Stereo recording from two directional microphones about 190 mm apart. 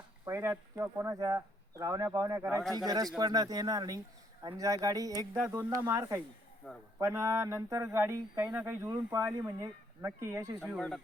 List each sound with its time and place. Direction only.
0.3 s speech: 15° right (ahead or behind)
5.3 s speech: 10° right (ahead or behind)
6.6 s speech: 5° left (ahead or behind)
7.0 s speech: 15° right (ahead or behind)
10.8 s speech: centre (ahead or behind)